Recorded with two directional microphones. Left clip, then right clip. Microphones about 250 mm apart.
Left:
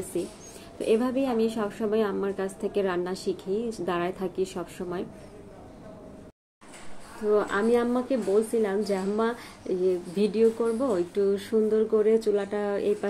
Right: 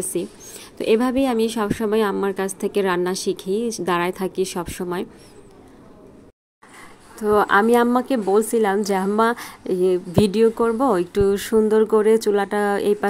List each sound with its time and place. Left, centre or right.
0.1 s a woman's voice: right
7.2 s a woman's voice: right